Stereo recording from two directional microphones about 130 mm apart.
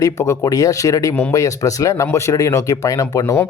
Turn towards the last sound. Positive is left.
turn(degrees=15)  # may be behind; listen again after turning